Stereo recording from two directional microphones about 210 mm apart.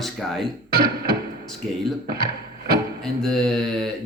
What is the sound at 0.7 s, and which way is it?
Speech, 45° right (ahead or behind).